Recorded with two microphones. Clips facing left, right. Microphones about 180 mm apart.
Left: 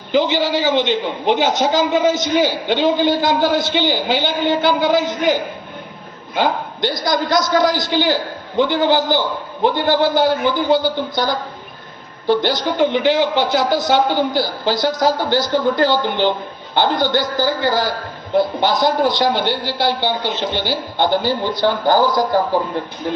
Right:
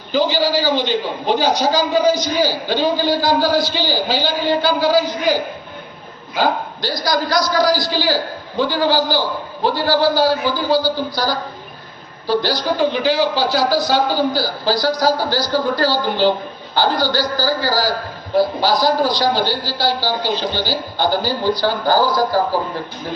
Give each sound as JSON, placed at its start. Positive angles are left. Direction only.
{"t": 0.1, "sound": "a man's voice", "side_deg": 20}
{"t": 12.3, "sound": "a man's voice", "side_deg": 20}